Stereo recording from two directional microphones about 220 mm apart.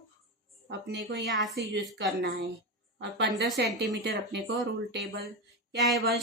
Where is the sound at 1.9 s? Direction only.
50° right (ahead or behind).